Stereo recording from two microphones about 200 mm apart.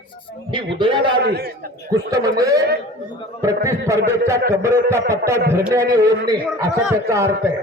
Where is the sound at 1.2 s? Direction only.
50° right (ahead or behind).